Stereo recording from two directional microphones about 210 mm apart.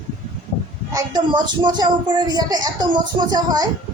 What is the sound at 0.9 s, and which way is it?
Speech, 20° right (ahead or behind).